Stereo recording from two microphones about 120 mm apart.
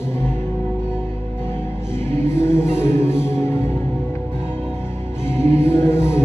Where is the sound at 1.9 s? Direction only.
20° left (ahead or behind).